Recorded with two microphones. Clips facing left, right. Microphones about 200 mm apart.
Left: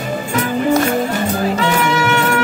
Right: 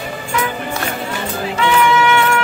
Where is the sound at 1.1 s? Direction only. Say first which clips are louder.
Left 5 dB; 40° left (ahead or behind).